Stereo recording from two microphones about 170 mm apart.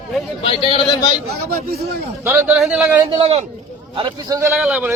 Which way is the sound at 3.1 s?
35° right (ahead or behind).